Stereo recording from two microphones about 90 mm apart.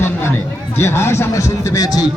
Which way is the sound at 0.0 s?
25° left (ahead or behind).